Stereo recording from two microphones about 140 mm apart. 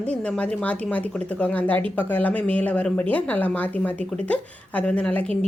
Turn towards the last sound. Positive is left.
turn(degrees=10)  # may be behind; listen again after turning